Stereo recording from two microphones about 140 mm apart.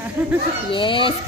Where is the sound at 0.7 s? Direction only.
35° left (ahead or behind).